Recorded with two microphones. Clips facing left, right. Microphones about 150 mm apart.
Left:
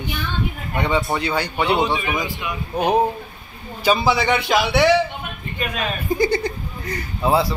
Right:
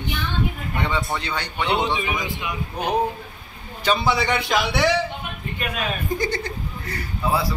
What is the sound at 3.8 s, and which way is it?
A man's voice, 5° left (ahead or behind).